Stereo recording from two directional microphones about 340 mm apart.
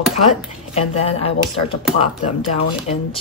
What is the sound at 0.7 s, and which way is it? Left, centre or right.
Speech, centre.